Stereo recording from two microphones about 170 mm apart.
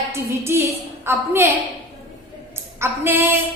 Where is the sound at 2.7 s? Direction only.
15° right (ahead or behind).